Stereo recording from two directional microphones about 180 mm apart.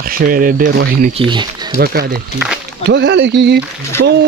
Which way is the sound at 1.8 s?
60° right (ahead or behind).